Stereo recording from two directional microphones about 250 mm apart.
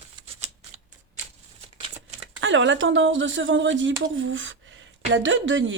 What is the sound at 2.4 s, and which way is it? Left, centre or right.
A woman's voice, right.